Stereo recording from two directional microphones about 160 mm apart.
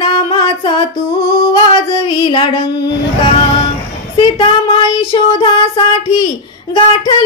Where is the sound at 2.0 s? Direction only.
30° left (ahead or behind).